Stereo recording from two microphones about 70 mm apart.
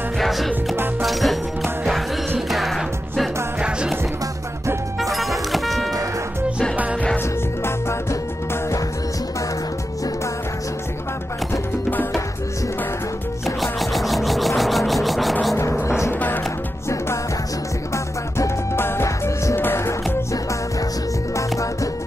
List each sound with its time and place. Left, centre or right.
0.2 s music: centre
5.0 s music: centre
13.6 s music: centre
16.1 s music: left
18.8 s music: left